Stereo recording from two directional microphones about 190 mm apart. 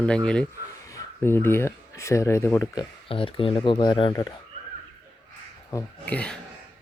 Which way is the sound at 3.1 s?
30° left (ahead or behind).